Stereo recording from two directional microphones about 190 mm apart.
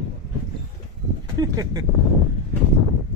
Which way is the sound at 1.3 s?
20° right (ahead or behind).